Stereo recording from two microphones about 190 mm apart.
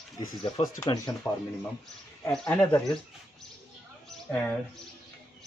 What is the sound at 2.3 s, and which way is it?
Speech, 5° left (ahead or behind).